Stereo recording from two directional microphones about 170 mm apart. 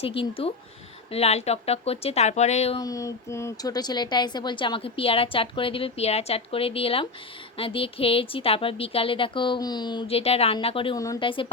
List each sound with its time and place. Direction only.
0.0 s a woman's voice: 35° left (ahead or behind)
2.7 s a woman's voice: 20° left (ahead or behind)
10.9 s speech: 20° left (ahead or behind)